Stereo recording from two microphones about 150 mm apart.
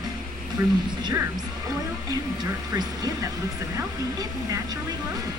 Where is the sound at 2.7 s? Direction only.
25° right (ahead or behind).